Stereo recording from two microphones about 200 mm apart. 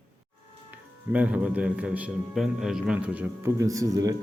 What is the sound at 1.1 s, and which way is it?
A man's voice, 5° right (ahead or behind).